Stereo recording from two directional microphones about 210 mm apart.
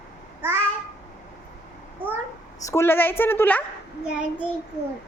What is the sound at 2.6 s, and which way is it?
A woman's voice, 10° left (ahead or behind).